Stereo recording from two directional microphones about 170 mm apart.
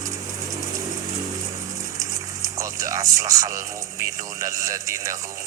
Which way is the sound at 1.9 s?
20° right (ahead or behind).